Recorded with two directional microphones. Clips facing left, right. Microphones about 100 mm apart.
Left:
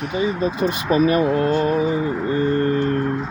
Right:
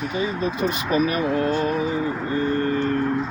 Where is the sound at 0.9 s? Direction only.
30° left (ahead or behind).